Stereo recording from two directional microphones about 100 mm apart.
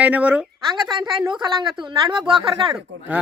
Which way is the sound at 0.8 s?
50° right (ahead or behind).